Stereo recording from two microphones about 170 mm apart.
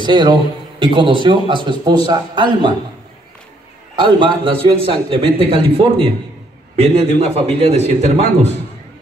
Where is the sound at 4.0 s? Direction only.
30° right (ahead or behind).